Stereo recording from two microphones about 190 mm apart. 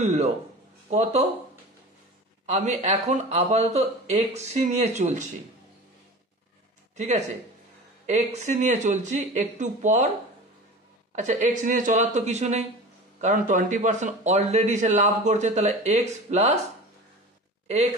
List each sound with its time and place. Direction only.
0.0 s a sound: 35° right (ahead or behind)
0.8 s speech: 35° right (ahead or behind)
2.4 s speech: 35° right (ahead or behind)
8.1 s speech: 35° right (ahead or behind)
11.1 s speech: 40° right (ahead or behind)